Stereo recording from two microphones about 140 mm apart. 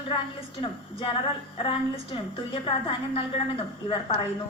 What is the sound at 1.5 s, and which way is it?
A woman's voice, 40° left (ahead or behind).